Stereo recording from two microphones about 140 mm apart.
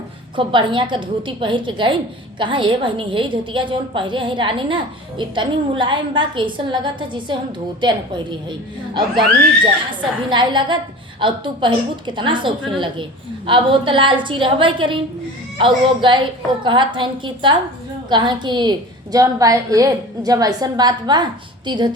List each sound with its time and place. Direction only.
0.3 s a woman's voice: 35° right (ahead or behind)
10.0 s a woman's voice: 35° right (ahead or behind)